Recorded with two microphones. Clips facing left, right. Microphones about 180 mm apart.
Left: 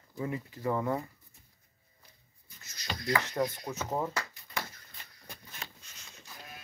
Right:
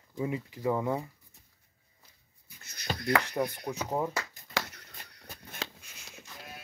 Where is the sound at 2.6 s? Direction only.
55° right (ahead or behind).